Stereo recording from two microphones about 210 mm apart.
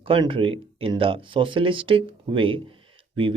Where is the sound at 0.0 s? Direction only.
25° right (ahead or behind).